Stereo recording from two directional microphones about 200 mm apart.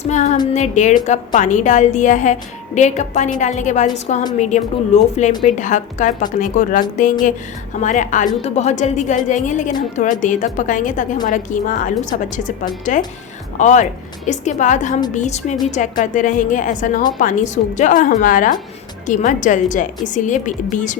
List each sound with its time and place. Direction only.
0.0 s a woman's voice: 35° left (ahead or behind)
13.6 s a woman's voice: 35° left (ahead or behind)